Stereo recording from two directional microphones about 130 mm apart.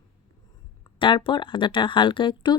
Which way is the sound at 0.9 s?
40° left (ahead or behind).